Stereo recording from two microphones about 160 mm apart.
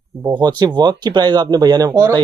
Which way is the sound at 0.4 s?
25° right (ahead or behind).